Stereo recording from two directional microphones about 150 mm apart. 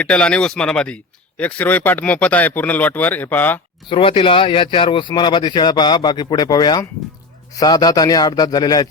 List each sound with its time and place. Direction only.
0.0 s speech: 5° left (ahead or behind)
3.8 s a man's voice: 35° left (ahead or behind)